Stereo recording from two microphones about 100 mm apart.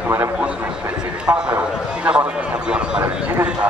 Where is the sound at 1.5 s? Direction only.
15° right (ahead or behind).